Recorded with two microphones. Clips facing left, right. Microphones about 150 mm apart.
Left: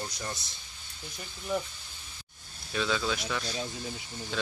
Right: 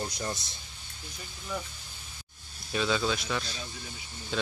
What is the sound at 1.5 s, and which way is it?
Speech, 25° left (ahead or behind).